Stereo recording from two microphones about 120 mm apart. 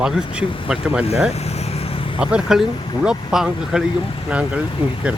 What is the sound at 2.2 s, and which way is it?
Speech, 5° right (ahead or behind).